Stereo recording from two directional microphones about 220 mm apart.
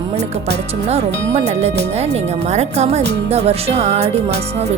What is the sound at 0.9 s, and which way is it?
Speech, 30° right (ahead or behind).